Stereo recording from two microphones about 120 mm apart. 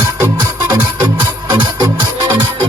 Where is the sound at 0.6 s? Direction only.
40° right (ahead or behind).